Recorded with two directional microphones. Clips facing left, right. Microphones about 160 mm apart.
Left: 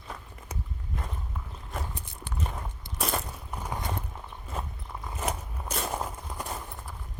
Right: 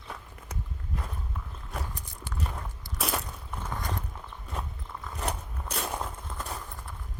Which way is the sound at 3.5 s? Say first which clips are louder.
Left 1 dB; 15° left (ahead or behind).